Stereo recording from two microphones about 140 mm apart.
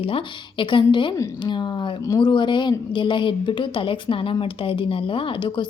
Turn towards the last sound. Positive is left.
turn(degrees=35)  # may be behind; listen again after turning